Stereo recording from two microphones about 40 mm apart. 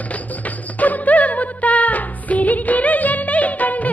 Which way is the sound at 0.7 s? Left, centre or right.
Left.